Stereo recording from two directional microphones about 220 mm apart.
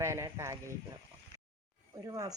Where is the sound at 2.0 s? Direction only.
15° right (ahead or behind).